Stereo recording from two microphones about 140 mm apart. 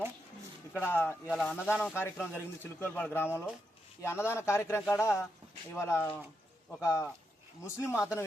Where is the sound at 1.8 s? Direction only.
15° left (ahead or behind).